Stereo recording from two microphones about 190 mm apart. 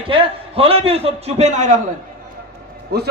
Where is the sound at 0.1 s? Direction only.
30° right (ahead or behind).